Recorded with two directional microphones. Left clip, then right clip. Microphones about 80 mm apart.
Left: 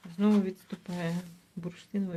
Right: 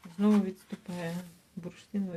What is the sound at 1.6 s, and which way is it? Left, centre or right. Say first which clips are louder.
Speech: left 2 dB; left.